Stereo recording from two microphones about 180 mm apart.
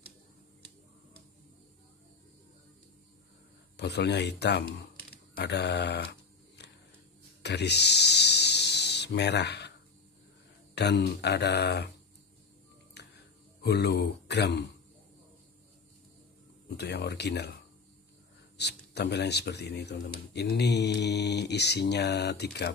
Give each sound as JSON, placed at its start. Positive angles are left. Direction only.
{"t": 3.7, "sound": "speech", "side_deg": 70}
{"t": 6.6, "sound": "a sound", "side_deg": 70}
{"t": 10.7, "sound": "speech", "side_deg": 70}
{"t": 12.9, "sound": "a sound", "side_deg": 70}
{"t": 16.7, "sound": "speech", "side_deg": 70}
{"t": 18.6, "sound": "speech", "side_deg": 70}